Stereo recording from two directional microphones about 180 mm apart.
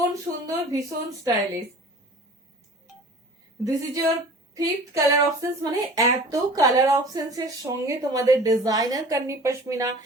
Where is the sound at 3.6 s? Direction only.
20° right (ahead or behind).